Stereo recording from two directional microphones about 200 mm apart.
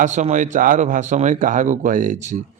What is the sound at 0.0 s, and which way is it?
Speech, 35° right (ahead or behind).